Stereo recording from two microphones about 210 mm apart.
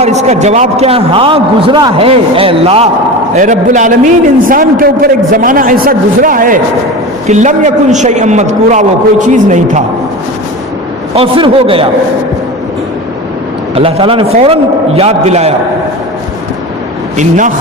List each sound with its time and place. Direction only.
0.0 s a man's voice: 30° right (ahead or behind)
3.3 s a man's voice: 40° right (ahead or behind)
11.1 s a man's voice: 25° right (ahead or behind)
13.7 s a man's voice: 25° right (ahead or behind)
17.2 s a man's voice: 35° right (ahead or behind)